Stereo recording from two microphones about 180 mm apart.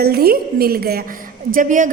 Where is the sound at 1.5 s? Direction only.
45° right (ahead or behind).